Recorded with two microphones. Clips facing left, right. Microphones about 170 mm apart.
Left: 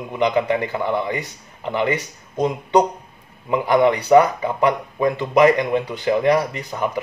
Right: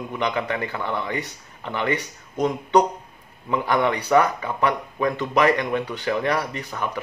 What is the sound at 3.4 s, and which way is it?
Speech, 15° left (ahead or behind).